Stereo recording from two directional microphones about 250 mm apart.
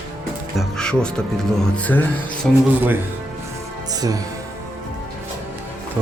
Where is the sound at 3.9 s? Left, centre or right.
Centre.